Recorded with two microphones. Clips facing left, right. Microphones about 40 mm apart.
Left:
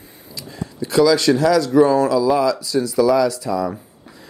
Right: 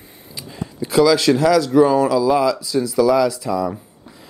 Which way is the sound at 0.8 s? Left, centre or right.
Centre.